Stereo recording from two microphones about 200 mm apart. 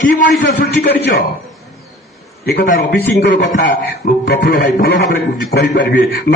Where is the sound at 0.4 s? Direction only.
55° left (ahead or behind).